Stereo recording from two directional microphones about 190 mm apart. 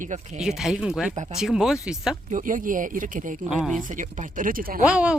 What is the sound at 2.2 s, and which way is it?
Speech, 45° right (ahead or behind).